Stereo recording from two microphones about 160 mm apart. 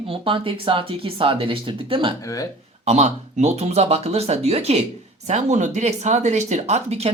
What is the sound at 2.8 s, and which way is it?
Speech, 45° right (ahead or behind).